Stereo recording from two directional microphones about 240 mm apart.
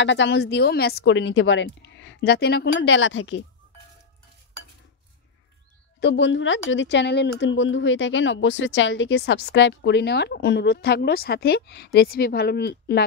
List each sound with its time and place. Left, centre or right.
0.0 s a woman's voice: left
5.9 s a woman's voice: left